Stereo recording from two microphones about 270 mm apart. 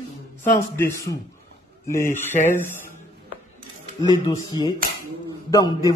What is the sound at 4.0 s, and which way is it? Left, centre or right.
A man's voice, centre.